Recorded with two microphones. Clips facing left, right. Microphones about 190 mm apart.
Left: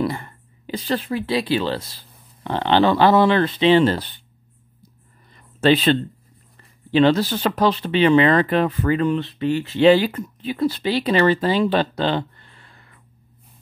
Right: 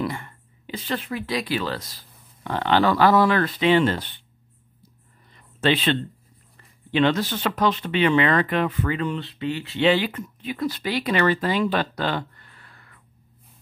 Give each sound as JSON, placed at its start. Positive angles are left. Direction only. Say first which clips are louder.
{"t": 0.0, "sound": "speech", "louder": "left 4 dB", "side_deg": 35}
{"t": 5.3, "sound": "a sound", "louder": "left 5 dB", "side_deg": 40}
{"t": 6.5, "sound": "speech", "louder": "left 6 dB", "side_deg": 35}